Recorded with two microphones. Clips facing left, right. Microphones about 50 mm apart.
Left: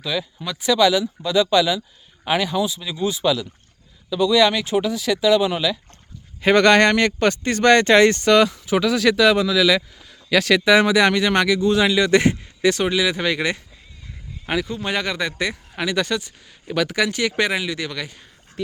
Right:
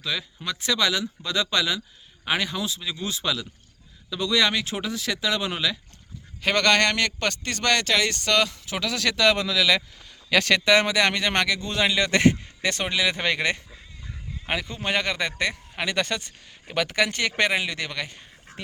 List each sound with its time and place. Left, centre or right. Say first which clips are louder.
0.0 s a man's voice: left 4 dB; centre
6.4 s a man's voice: left 7 dB; centre
14.4 s speech: left 4 dB; centre